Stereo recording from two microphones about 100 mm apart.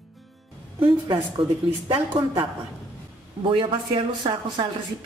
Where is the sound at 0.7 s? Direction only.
55° right (ahead or behind).